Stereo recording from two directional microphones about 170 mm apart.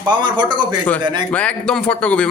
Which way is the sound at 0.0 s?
25° right (ahead or behind).